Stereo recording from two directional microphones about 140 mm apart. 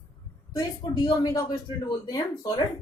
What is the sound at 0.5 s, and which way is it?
Speech, 30° left (ahead or behind).